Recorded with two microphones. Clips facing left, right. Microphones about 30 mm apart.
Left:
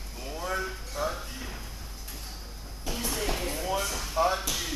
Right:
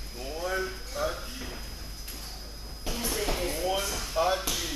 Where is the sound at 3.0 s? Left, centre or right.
Centre.